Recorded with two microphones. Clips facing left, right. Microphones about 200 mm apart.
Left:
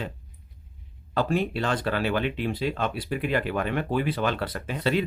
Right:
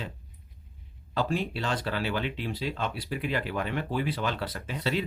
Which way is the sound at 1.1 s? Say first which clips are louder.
Left 4 dB; 55° left (ahead or behind).